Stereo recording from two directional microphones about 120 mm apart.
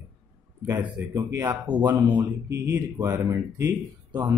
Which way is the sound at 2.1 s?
20° right (ahead or behind).